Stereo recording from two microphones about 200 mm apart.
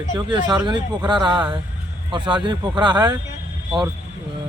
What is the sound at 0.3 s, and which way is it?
Speech, 25° right (ahead or behind).